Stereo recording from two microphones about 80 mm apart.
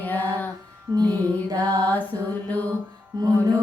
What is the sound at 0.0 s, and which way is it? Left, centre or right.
Female singing, left.